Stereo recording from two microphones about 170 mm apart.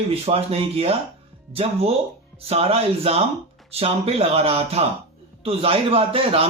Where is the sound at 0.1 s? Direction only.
35° right (ahead or behind).